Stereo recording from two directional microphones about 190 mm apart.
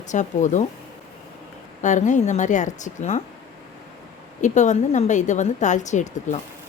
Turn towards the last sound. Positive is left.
turn(degrees=40)  # may be behind; listen again after turning